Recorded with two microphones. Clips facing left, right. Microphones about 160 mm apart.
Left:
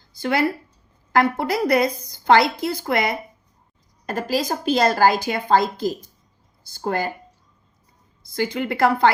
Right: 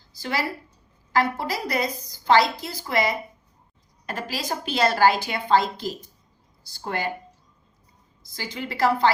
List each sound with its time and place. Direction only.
0.2 s a woman's voice: 55° left (ahead or behind)
4.0 s a woman's voice: 45° left (ahead or behind)
8.4 s a woman's voice: 55° left (ahead or behind)